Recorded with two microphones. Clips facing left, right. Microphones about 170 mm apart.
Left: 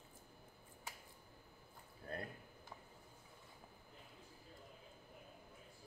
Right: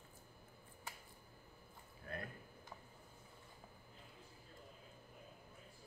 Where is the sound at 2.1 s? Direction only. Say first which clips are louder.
Left 1 dB; 35° left (ahead or behind).